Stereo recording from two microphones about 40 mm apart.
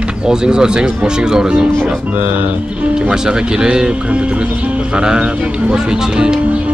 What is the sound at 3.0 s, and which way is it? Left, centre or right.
Speech, centre.